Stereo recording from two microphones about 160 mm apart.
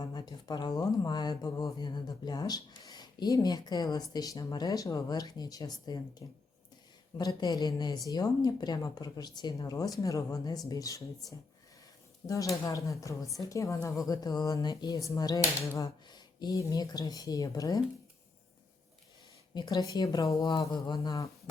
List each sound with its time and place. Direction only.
0.0 s speech: 25° left (ahead or behind)
19.5 s speech: 25° left (ahead or behind)